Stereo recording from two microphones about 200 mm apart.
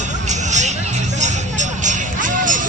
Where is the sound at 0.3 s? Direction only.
35° right (ahead or behind).